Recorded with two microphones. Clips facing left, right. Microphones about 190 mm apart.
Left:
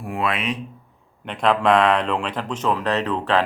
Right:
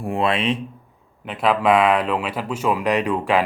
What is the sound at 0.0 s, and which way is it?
Speech, 30° right (ahead or behind).